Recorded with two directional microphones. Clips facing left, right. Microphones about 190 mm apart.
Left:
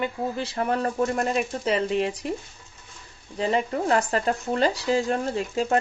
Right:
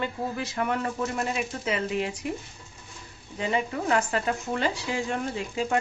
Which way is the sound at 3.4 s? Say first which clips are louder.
Left 4 dB; 35° left (ahead or behind).